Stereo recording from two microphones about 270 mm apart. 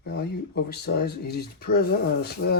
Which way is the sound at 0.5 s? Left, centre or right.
Left.